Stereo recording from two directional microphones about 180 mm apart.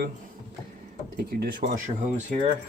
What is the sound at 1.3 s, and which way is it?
Speech, 55° right (ahead or behind).